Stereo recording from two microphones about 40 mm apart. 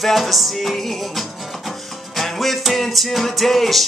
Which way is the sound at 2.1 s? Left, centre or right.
Centre.